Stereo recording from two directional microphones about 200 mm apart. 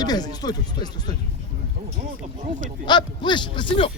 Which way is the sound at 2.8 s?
20° left (ahead or behind).